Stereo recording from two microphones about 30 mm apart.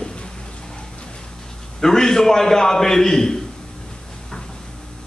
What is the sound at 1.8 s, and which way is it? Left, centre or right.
A man's voice, centre.